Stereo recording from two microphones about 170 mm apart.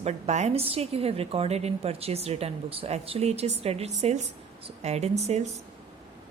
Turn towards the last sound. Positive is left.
turn(degrees=-40)  # may be behind; listen again after turning